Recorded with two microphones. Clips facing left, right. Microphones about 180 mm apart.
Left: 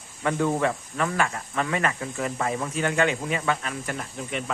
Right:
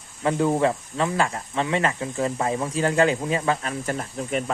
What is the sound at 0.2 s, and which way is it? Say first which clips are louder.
Speech: right 3 dB; 25° right (ahead or behind).